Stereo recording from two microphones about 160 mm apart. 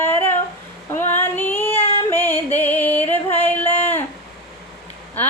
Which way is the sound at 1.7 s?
40° left (ahead or behind).